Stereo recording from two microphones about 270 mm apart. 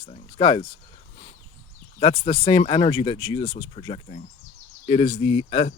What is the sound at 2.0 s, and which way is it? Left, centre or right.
Speech, left.